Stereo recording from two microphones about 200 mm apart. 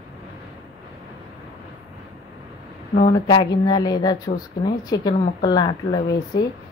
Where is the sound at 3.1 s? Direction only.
20° left (ahead or behind).